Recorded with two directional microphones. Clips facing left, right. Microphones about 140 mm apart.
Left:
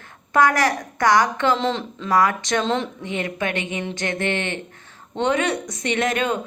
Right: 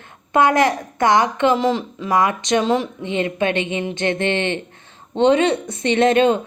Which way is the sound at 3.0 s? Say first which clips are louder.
Right 5 dB; 20° right (ahead or behind).